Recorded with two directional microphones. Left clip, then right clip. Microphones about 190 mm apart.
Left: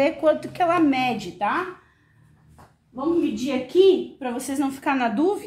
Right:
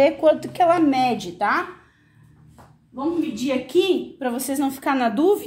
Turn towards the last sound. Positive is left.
turn(degrees=-30)  # may be behind; listen again after turning